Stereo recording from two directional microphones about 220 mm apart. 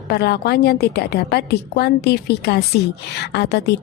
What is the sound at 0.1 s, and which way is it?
A woman's voice, 45° left (ahead or behind).